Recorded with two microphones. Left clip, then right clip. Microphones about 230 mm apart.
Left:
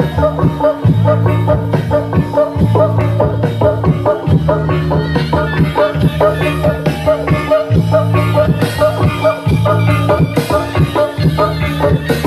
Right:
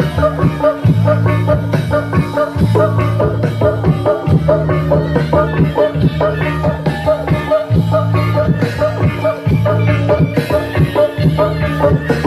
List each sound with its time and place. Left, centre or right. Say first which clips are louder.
0.4 s music: left 1 dB; right
2.7 s music: left 1 dB; right
4.9 s music: right 4 dB; left